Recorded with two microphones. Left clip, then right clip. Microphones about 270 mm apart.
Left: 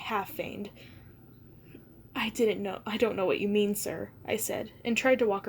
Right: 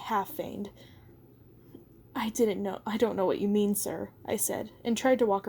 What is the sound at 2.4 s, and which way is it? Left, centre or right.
A woman's voice, right.